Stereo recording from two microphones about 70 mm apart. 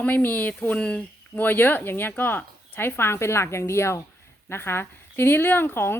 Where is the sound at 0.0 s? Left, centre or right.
Left.